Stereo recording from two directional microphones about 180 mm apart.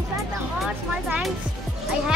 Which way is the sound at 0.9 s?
5° right (ahead or behind).